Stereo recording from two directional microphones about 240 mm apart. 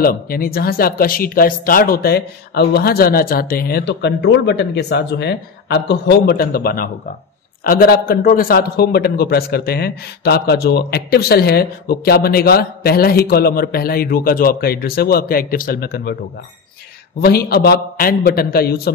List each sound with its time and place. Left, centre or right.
0.0 s a man's voice: left
17.2 s a man's voice: left